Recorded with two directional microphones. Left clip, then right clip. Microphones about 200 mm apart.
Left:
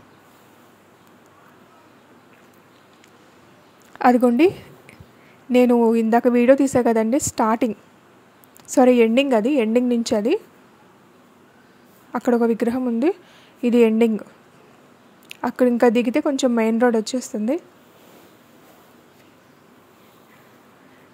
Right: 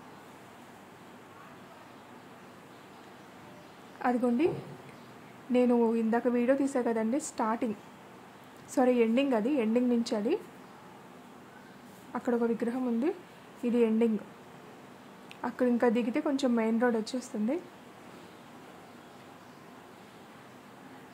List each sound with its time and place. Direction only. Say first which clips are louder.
4.0 s speech: left 13 dB; 45° left (ahead or behind)
5.5 s speech: left 10 dB; 40° left (ahead or behind)
12.1 s speech: left 11 dB; 40° left (ahead or behind)
15.2 s speech: left 11 dB; 40° left (ahead or behind)